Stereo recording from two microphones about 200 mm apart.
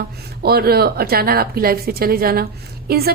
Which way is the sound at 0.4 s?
50° right (ahead or behind).